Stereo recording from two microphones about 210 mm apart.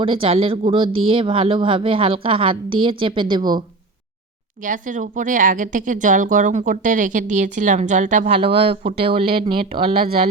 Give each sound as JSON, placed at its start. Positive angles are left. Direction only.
{"t": 0.0, "sound": "speech", "side_deg": -25}
{"t": 4.6, "sound": "speech", "side_deg": -40}